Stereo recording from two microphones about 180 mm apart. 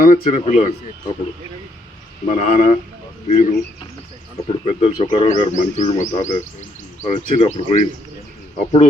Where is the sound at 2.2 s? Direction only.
40° left (ahead or behind).